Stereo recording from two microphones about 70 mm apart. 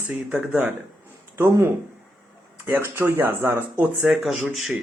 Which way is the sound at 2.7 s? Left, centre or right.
Right.